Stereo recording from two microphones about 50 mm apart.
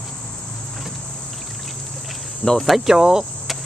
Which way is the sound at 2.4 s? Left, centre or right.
Centre.